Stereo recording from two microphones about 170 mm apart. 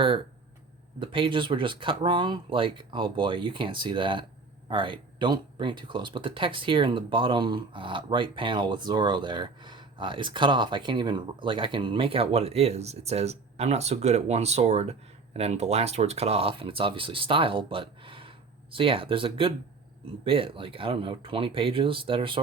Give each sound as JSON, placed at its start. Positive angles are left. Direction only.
{"t": 0.9, "sound": "speech", "side_deg": -30}